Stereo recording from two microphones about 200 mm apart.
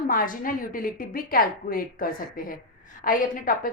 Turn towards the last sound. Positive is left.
turn(degrees=45)  # may be behind; listen again after turning